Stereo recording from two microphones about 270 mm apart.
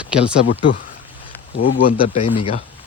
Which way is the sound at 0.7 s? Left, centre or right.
Left.